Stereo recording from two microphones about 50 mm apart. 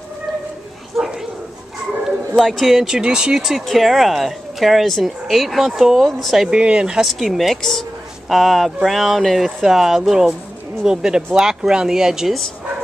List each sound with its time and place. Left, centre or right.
0.9 s bow-wow: centre
2.0 s speech: centre
3.0 s speech: centre
3.4 s speech: centre
6.5 s speech: centre
7.0 s speech: centre